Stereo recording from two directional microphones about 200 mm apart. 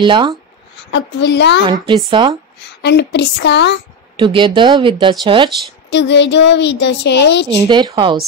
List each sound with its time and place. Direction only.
0.0 s speech: 25° right (ahead or behind)
0.9 s a woman's voice: 60° left (ahead or behind)
2.0 s speech: 25° right (ahead or behind)
2.8 s a woman's voice: 60° left (ahead or behind)
4.2 s speech: 25° right (ahead or behind)
5.9 s a woman's voice: 60° left (ahead or behind)
7.4 s speech: 20° right (ahead or behind)